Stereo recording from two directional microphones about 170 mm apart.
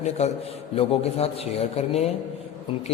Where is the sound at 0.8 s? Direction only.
35° left (ahead or behind).